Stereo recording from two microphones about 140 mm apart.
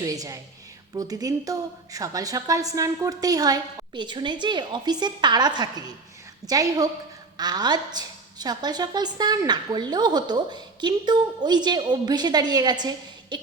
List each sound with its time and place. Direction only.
0.0 s a woman's voice: 25° right (ahead or behind)
13.3 s cough: 35° right (ahead or behind)